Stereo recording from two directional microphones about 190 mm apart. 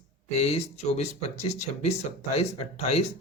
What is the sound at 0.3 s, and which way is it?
Speech, 35° left (ahead or behind).